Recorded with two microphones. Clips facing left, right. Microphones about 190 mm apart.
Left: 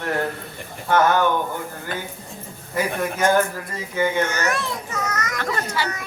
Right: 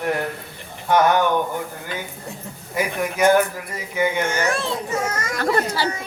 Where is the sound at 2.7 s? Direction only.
15° right (ahead or behind).